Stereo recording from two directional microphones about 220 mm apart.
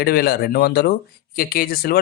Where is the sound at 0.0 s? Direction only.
45° left (ahead or behind).